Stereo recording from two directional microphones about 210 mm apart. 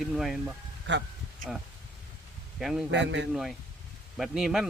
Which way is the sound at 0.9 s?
60° right (ahead or behind).